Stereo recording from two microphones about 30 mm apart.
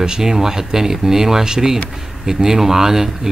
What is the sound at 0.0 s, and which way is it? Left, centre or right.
Speech, right.